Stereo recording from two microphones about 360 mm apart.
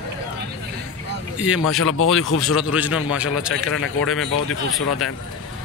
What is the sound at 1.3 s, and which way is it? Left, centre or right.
Speech, centre.